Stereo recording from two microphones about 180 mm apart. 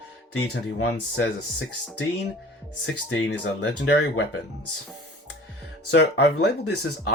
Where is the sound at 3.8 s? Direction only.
70° left (ahead or behind).